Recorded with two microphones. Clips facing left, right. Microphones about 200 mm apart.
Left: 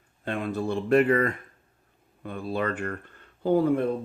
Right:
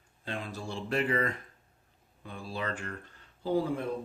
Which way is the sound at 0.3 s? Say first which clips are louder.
Left 10 dB; 60° left (ahead or behind).